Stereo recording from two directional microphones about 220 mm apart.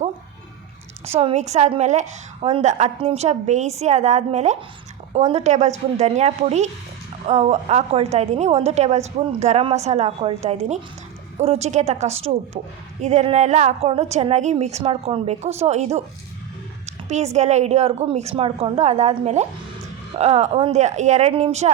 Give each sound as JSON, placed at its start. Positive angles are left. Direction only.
{"t": 1.0, "sound": "a woman's voice", "side_deg": -30}
{"t": 16.8, "sound": "a sound", "side_deg": -30}
{"t": 17.3, "sound": "a woman's voice", "side_deg": -30}